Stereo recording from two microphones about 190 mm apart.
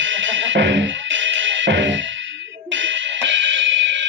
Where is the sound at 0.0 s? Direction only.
75° right (ahead or behind).